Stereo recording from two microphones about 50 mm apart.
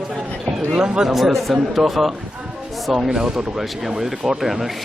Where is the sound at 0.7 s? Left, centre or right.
Centre.